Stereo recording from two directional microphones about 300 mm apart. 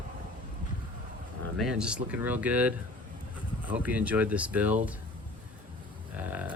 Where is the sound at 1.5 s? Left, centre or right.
Centre.